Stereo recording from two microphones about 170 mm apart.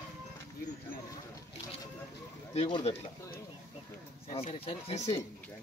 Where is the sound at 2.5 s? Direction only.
35° left (ahead or behind).